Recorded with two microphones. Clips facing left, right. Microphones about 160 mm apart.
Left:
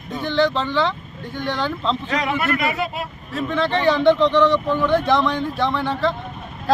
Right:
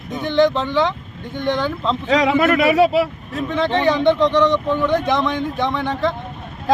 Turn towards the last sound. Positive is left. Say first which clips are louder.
# right 1 dB
turn(degrees=-15)  # may be behind; listen again after turning